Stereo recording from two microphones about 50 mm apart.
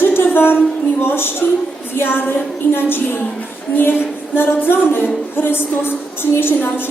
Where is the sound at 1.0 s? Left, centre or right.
Left.